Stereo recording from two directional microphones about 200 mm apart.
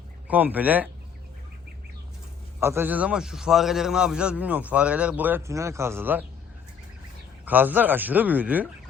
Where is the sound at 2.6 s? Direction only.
10° right (ahead or behind).